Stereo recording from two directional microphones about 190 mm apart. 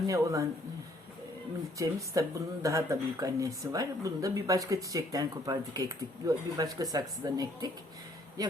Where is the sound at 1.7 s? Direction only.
15° right (ahead or behind).